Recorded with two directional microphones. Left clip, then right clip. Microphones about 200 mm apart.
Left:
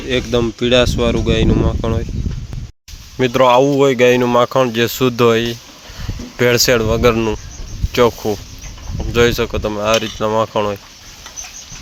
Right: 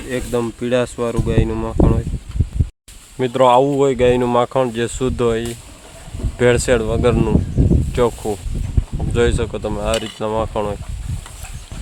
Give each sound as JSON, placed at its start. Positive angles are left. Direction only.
{"t": 0.1, "sound": "speech", "side_deg": 10}
{"t": 3.2, "sound": "speech", "side_deg": 5}